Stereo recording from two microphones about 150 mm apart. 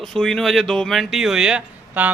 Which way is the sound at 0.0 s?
5° left (ahead or behind).